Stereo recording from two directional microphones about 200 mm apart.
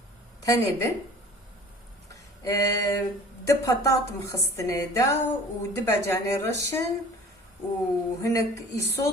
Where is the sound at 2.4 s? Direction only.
15° left (ahead or behind).